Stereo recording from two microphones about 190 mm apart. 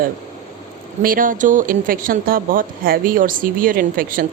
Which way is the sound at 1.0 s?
45° right (ahead or behind).